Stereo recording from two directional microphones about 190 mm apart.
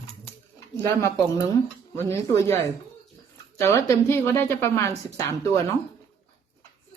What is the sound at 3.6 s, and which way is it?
A woman's voice, 15° left (ahead or behind).